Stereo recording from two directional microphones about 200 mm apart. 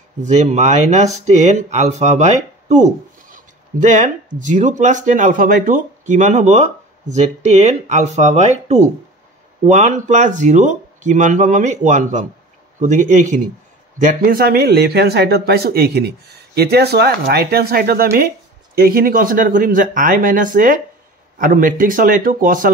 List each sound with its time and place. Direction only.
0.2 s speech: 35° right (ahead or behind)